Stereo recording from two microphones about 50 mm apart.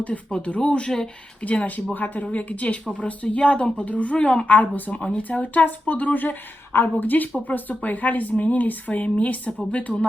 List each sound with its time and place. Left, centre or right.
0.3 s a woman's voice: left
1.5 s a woman's voice: left